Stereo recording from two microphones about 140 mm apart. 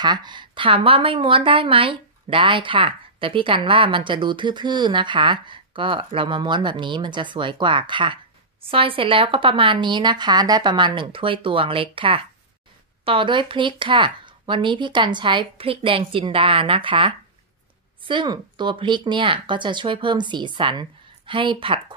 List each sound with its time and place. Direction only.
0.0 s speech: 30° right (ahead or behind)